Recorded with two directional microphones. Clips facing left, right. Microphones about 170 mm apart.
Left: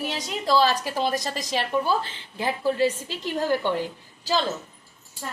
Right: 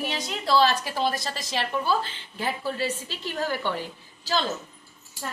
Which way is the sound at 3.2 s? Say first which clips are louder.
Left 4 dB; 20° left (ahead or behind).